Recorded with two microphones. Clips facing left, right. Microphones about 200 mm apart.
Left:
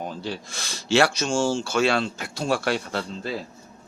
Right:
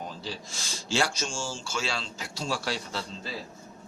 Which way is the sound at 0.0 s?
60° left (ahead or behind).